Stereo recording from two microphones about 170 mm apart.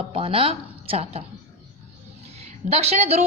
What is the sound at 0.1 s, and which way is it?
Speech, 35° right (ahead or behind).